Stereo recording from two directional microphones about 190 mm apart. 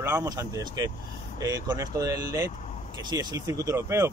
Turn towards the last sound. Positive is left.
turn(degrees=-15)  # may be behind; listen again after turning